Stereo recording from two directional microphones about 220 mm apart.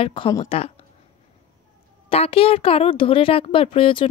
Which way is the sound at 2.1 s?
25° left (ahead or behind).